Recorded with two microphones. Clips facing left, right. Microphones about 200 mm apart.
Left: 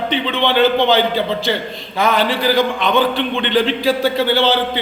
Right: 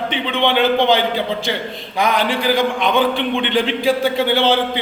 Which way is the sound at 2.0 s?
15° right (ahead or behind).